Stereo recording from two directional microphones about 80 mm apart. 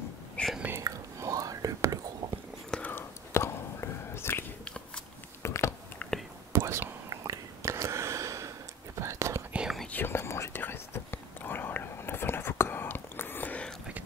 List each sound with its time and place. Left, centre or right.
0.4 s whispering: centre
0.8 s whispering: right
2.9 s whispering: left
5.4 s a sound: left
6.0 s whispering: centre
6.5 s whispering: right
9.5 s whispering: centre
9.9 s whispering: left